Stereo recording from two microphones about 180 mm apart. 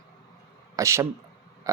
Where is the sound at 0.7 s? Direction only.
15° right (ahead or behind).